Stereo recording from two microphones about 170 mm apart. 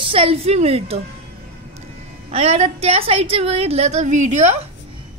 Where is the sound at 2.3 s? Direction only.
35° right (ahead or behind).